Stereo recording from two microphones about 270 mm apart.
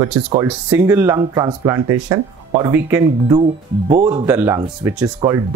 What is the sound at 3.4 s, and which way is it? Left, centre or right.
Speech, centre.